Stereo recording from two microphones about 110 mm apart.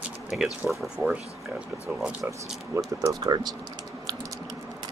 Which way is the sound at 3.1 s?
40° right (ahead or behind).